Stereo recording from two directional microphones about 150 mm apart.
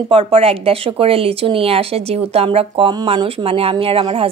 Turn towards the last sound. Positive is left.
turn(degrees=-35)  # may be behind; listen again after turning